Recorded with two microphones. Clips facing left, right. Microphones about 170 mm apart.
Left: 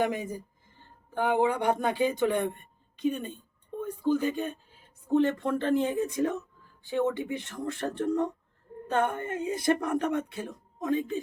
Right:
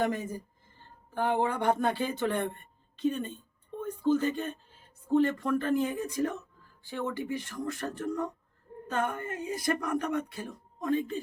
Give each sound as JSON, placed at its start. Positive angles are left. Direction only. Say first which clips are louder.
{"t": 0.0, "sound": "a woman's voice", "louder": "left 1 dB", "side_deg": 15}